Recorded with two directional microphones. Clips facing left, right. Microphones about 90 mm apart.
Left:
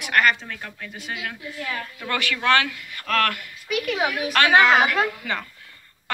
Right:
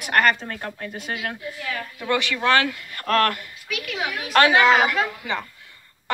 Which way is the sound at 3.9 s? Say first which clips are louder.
Left 4 dB; 50° left (ahead or behind).